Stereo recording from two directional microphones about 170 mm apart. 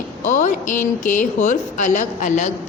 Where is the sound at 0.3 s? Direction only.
45° left (ahead or behind).